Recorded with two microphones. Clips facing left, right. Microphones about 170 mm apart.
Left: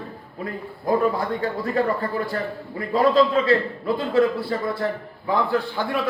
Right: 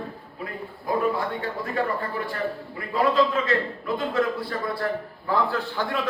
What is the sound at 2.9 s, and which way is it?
A man's voice, 35° left (ahead or behind).